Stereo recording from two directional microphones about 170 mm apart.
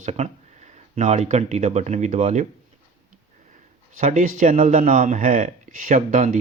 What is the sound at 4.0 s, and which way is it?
Speech, 45° right (ahead or behind).